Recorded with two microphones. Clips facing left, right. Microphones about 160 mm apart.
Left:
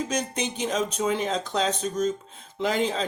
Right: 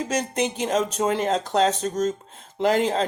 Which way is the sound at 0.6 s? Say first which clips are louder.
Right 1 dB; 50° right (ahead or behind).